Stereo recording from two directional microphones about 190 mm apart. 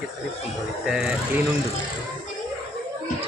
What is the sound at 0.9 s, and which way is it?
Speech, 5° right (ahead or behind).